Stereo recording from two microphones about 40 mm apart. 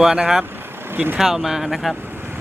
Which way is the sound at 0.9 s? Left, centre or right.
Right.